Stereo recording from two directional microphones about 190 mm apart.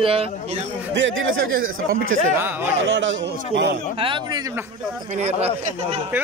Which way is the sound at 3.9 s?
25° right (ahead or behind).